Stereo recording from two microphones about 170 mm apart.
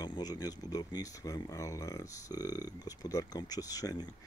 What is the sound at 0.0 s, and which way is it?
Speech, 25° left (ahead or behind).